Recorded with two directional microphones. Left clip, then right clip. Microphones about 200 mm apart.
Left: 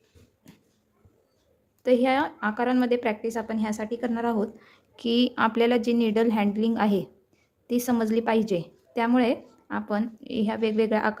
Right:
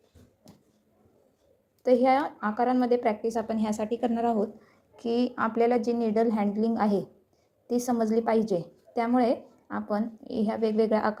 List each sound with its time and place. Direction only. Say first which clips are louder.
1.8 s a woman's voice: even; 15° left (ahead or behind)
5.1 s a woman's voice: left 3 dB; 25° left (ahead or behind)